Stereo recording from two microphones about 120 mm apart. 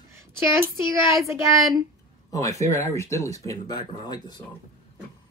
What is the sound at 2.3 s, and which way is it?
Speech, 30° left (ahead or behind).